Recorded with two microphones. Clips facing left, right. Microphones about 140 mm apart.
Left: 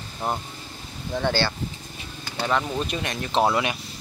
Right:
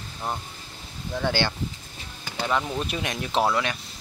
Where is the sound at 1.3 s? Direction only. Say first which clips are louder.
Left 1 dB; 15° right (ahead or behind).